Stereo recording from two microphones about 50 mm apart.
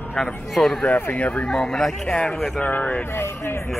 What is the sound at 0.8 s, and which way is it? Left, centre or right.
Speech, left.